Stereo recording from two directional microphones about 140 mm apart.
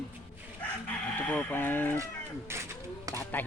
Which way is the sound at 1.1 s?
10° left (ahead or behind).